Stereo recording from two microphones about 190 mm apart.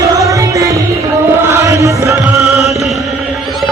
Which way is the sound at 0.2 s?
15° right (ahead or behind).